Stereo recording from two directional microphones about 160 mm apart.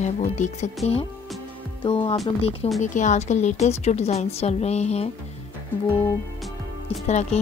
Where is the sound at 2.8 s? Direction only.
50° left (ahead or behind).